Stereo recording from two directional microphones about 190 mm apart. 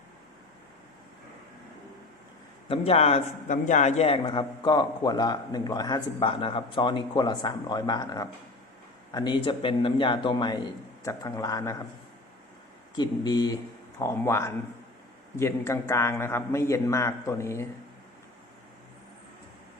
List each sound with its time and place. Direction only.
2.6 s a man's voice: 30° left (ahead or behind)
13.0 s a man's voice: 20° left (ahead or behind)